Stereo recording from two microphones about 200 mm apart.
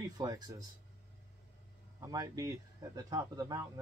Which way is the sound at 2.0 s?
20° right (ahead or behind).